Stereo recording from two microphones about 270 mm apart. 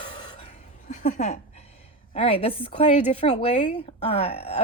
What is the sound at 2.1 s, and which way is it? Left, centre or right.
A woman's voice, left.